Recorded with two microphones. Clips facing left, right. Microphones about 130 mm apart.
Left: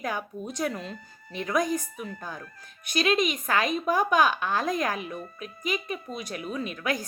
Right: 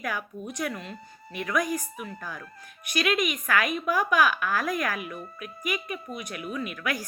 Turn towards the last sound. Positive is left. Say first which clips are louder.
# left 1 dB
turn(degrees=25)  # may be behind; listen again after turning